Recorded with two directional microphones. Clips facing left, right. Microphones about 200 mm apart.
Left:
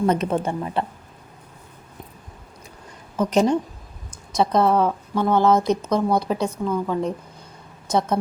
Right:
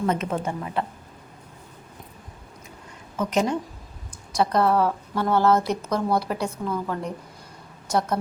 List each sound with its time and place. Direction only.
0.0 s speech: 35° left (ahead or behind)
3.2 s speech: 35° left (ahead or behind)
4.1 s a woman's voice: 20° left (ahead or behind)